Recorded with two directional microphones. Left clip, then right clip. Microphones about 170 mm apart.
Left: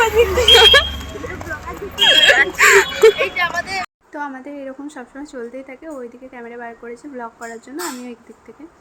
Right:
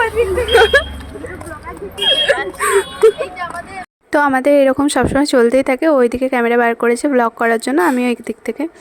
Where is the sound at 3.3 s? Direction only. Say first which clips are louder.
Left 5 dB; 20° left (ahead or behind).